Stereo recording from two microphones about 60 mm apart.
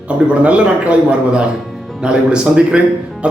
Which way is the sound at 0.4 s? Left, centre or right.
Right.